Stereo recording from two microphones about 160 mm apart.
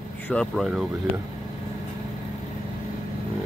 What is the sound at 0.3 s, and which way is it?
Speech, 5° left (ahead or behind).